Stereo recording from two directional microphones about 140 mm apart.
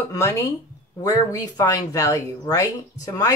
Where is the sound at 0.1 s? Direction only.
20° left (ahead or behind).